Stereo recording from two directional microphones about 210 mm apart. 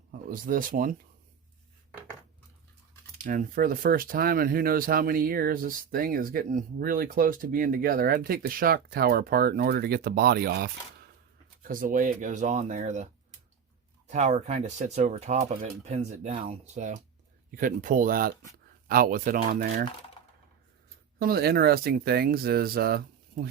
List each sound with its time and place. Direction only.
0.1 s speech: 40° right (ahead or behind)
3.2 s speech: 40° right (ahead or behind)
11.7 s speech: 40° right (ahead or behind)
14.1 s speech: 35° right (ahead or behind)
21.2 s speech: 45° right (ahead or behind)